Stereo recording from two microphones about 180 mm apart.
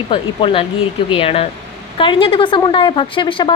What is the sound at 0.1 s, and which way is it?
A woman's voice, 30° left (ahead or behind).